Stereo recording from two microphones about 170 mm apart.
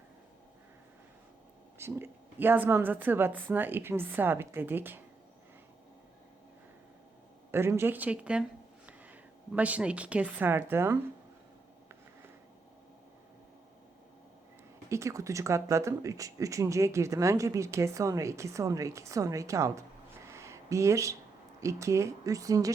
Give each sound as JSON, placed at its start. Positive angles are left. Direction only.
{"t": 1.8, "sound": "speech", "side_deg": -10}
{"t": 7.5, "sound": "a woman's voice", "side_deg": -15}
{"t": 14.8, "sound": "speech", "side_deg": -15}
{"t": 20.3, "sound": "a sound", "side_deg": -15}
{"t": 21.6, "sound": "speech", "side_deg": -20}